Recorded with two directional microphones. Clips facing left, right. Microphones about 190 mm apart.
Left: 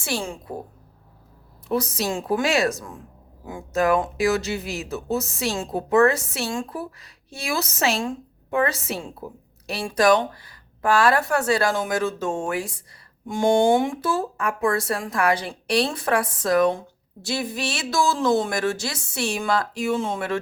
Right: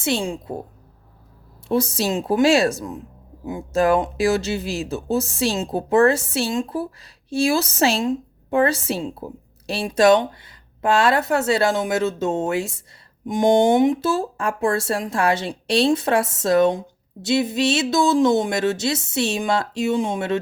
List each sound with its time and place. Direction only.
0.0 s speech: 20° right (ahead or behind)
1.6 s speech: 25° right (ahead or behind)